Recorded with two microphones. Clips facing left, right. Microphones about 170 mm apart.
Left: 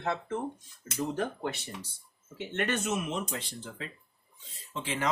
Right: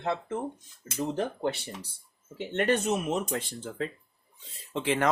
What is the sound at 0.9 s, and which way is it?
Speech, 35° right (ahead or behind).